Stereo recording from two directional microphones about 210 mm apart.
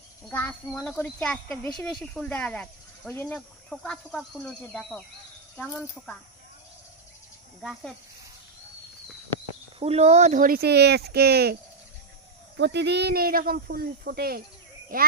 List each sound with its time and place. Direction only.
0.3 s speech: 10° left (ahead or behind)
9.8 s speech: 30° right (ahead or behind); by 11.5 s 50° right (ahead or behind)
12.5 s speech: 55° right (ahead or behind)